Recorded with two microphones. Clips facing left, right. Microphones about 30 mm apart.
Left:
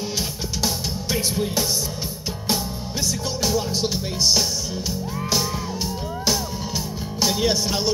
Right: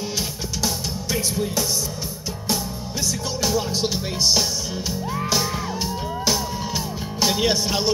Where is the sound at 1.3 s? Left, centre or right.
Centre.